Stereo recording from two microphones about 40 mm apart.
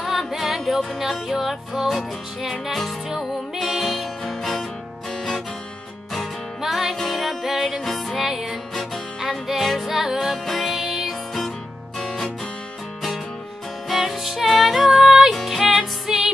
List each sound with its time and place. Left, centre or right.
0.3 s music: centre
6.6 s music: centre
8.2 s music: centre
10.1 s music: centre
13.8 s music: centre
15.0 s music: centre
15.4 s music: centre